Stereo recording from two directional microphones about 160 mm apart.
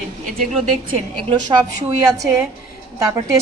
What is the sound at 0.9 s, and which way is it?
Speech, 35° right (ahead or behind).